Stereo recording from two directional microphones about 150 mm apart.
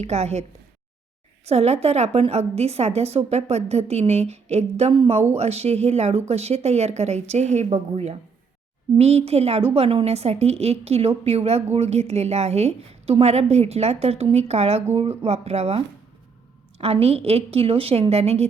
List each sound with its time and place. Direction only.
0.0 s a woman's voice: 45° right (ahead or behind)
1.5 s a woman's voice: 45° right (ahead or behind)